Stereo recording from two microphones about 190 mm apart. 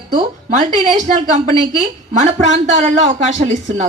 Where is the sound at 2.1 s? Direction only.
40° right (ahead or behind).